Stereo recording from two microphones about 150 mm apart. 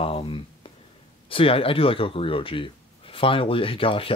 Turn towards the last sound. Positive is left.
turn(degrees=35)  # may be behind; listen again after turning